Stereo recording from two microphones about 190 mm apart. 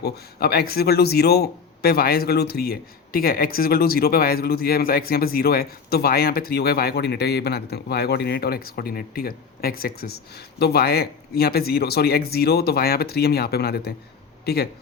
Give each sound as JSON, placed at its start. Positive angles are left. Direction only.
{"t": 0.0, "sound": "a man's voice", "side_deg": 55}